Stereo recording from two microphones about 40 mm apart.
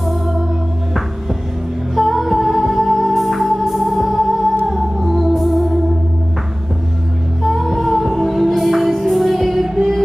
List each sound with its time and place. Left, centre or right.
2.0 s music: centre
7.4 s music: centre